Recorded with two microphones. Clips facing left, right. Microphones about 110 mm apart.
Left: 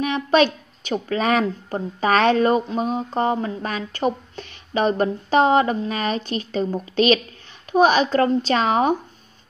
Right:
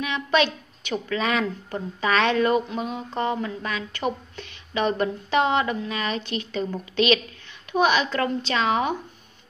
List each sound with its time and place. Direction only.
0.0 s a woman's voice: 40° left (ahead or behind)